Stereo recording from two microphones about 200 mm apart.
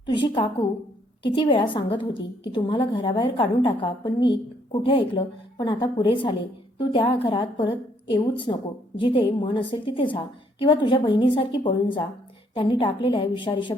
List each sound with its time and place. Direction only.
0.0 s a woman's voice: 25° left (ahead or behind)